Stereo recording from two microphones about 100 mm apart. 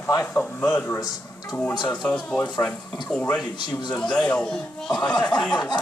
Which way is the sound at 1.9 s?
10° left (ahead or behind).